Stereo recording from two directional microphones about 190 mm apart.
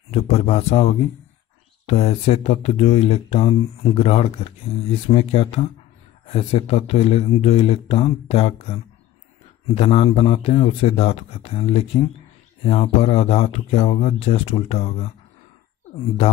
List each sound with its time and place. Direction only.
0.1 s speech: 35° left (ahead or behind)